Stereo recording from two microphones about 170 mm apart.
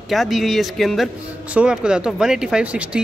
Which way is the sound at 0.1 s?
Centre (ahead or behind).